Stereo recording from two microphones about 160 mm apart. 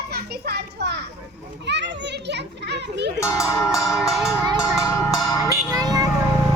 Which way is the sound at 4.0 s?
5° right (ahead or behind).